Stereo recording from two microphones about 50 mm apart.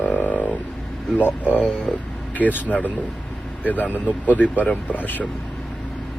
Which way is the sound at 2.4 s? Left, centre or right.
Left.